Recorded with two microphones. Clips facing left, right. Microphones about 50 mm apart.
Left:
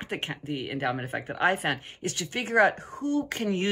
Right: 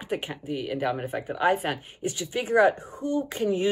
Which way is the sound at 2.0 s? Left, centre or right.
Left.